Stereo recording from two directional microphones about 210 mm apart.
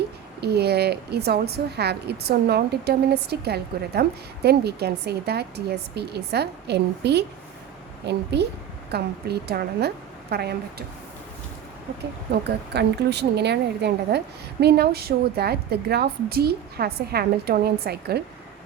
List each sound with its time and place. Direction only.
0.4 s a woman's voice: 50° right (ahead or behind)
12.5 s a woman's voice: 55° right (ahead or behind)